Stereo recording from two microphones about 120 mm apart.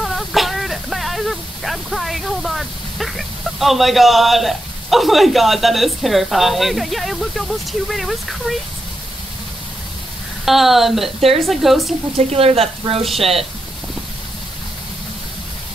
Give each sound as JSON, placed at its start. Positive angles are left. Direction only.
{"t": 0.0, "sound": "speech", "side_deg": 0}
{"t": 10.4, "sound": "speech", "side_deg": 0}
{"t": 12.2, "sound": "speech", "side_deg": -60}